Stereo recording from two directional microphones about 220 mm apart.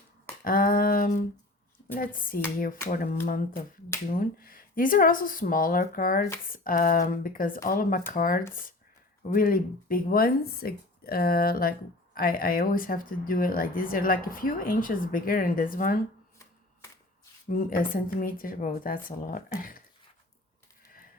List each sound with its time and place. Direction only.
0.4 s speech: 40° left (ahead or behind)
17.5 s speech: 40° left (ahead or behind)